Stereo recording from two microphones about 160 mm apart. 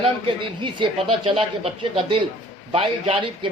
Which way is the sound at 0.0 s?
30° right (ahead or behind).